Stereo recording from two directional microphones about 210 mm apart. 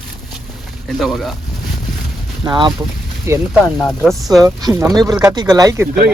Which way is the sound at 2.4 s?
20° right (ahead or behind).